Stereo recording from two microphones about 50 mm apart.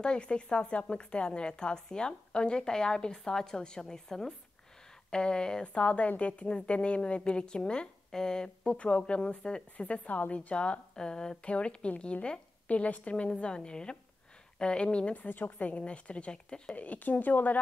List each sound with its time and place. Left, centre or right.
0.0 s a woman's voice: centre
15.2 s a woman's voice: left
15.8 s a woman's voice: left
16.7 s a woman's voice: left